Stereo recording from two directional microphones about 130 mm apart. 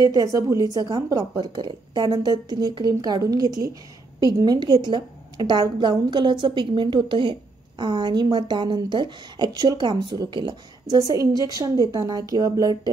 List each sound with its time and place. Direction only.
0.0 s a woman's voice: 25° right (ahead or behind)